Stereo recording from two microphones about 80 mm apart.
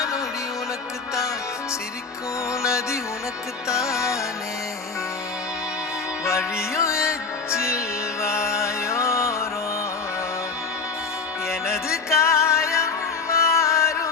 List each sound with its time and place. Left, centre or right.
2.5 s music: left
6.2 s music: left
11.6 s music: left